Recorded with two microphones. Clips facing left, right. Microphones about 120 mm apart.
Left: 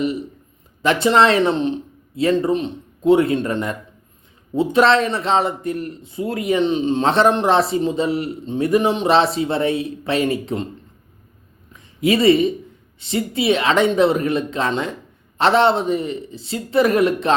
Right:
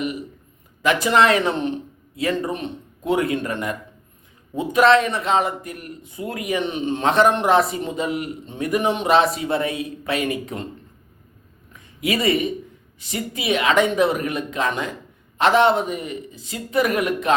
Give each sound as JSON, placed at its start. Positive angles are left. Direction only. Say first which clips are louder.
{"t": 0.8, "sound": "speech", "louder": "left 2 dB", "side_deg": 30}
{"t": 11.7, "sound": "a sound", "louder": "left 6 dB", "side_deg": 30}
{"t": 13.0, "sound": "speech", "louder": "left 7 dB", "side_deg": 30}